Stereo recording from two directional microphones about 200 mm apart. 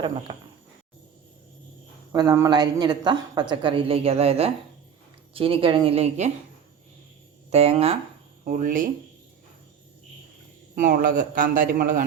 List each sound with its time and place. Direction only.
0.3 s speech: 25° right (ahead or behind)
2.1 s speech: 15° right (ahead or behind); by 6.3 s 35° right (ahead or behind)
7.5 s speech: 30° right (ahead or behind)
10.8 s a man's voice: 40° right (ahead or behind)